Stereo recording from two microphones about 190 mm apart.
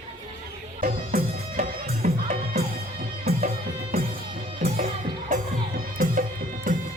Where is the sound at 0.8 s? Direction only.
45° right (ahead or behind).